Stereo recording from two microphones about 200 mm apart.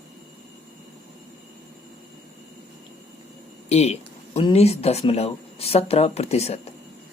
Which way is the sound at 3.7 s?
30° left (ahead or behind).